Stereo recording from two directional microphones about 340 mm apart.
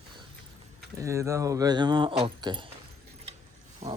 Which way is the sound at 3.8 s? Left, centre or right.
Centre.